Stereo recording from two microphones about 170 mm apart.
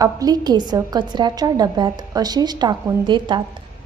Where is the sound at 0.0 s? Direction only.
20° right (ahead or behind).